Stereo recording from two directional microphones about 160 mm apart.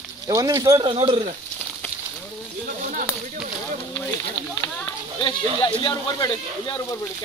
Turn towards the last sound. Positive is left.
turn(degrees=25)  # may be behind; listen again after turning